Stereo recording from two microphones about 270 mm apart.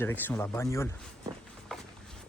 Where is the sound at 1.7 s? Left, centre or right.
Centre.